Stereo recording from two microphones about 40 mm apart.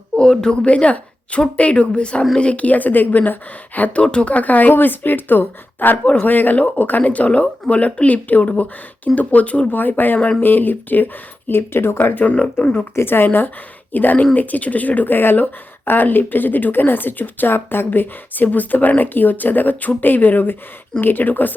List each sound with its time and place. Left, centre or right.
0.2 s a woman's voice: left
0.6 s a woman's voice: left
3.8 s speech: left
4.7 s speech: left
7.0 s speech: left
9.7 s speech: left
12.1 s speech: left
12.5 s speech: left
13.0 s speech: left
13.9 s speech: left
17.5 s speech: left